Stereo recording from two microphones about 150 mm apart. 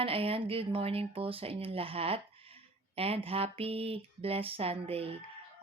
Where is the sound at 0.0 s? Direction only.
40° right (ahead or behind).